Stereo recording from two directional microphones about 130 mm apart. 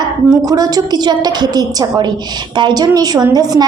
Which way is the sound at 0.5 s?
30° right (ahead or behind).